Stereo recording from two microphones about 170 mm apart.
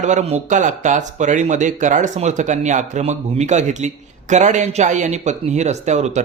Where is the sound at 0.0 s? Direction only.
40° right (ahead or behind).